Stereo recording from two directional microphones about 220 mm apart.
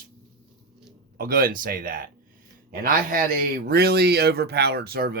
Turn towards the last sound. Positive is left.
turn(degrees=-45)  # may be behind; listen again after turning